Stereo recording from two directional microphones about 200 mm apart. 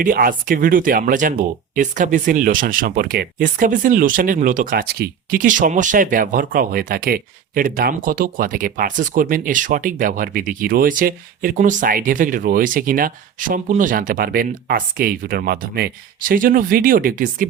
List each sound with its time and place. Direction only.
0.0 s speech: 45° right (ahead or behind)